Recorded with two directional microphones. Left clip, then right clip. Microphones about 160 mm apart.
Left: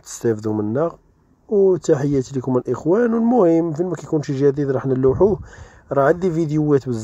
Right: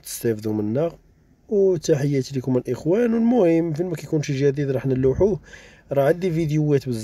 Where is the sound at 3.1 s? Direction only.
15° right (ahead or behind).